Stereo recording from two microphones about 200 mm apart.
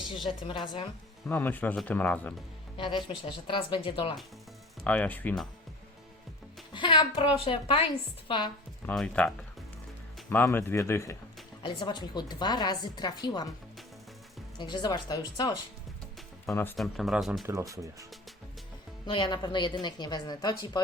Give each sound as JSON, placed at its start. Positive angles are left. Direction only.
{"t": 0.3, "sound": "a woman's voice", "side_deg": 25}
{"t": 1.3, "sound": "speech", "side_deg": 10}
{"t": 2.7, "sound": "a woman's voice", "side_deg": 25}
{"t": 4.8, "sound": "speech", "side_deg": 5}
{"t": 6.7, "sound": "a woman's voice", "side_deg": 25}
{"t": 8.9, "sound": "a woman's voice", "side_deg": 5}
{"t": 14.6, "sound": "a woman's voice", "side_deg": 20}
{"t": 16.7, "sound": "speech", "side_deg": 0}
{"t": 17.4, "sound": "speech", "side_deg": -15}
{"t": 19.0, "sound": "a woman's voice", "side_deg": 25}